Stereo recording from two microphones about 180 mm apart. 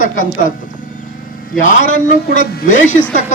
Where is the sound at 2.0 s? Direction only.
45° left (ahead or behind).